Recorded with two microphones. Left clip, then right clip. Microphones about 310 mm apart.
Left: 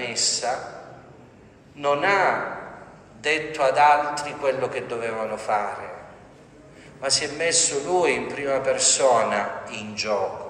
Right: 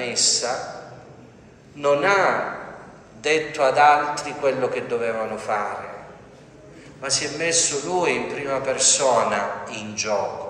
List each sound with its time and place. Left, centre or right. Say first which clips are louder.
0.0 s a sound: right 3 dB; left
1.8 s a man's voice: right 2 dB; left
7.0 s a man's voice: left 1 dB; left